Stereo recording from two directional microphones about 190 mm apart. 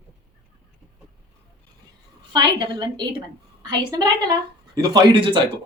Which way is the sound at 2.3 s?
25° right (ahead or behind).